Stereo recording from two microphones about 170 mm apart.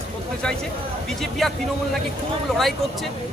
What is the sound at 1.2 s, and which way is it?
Speech, centre (ahead or behind).